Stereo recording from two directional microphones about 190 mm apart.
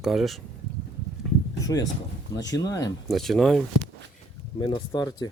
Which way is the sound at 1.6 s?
20° left (ahead or behind).